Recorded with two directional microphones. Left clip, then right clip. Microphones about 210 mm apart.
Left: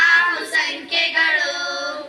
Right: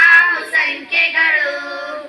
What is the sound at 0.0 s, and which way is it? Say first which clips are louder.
Music: right 5 dB; 65° left (ahead or behind).